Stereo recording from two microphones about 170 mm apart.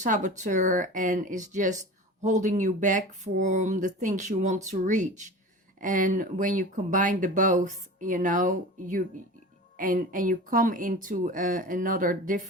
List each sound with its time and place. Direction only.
0.0 s speech: 45° right (ahead or behind)